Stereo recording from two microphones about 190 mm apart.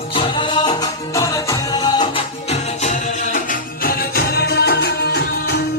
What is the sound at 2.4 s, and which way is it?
Music, 35° left (ahead or behind).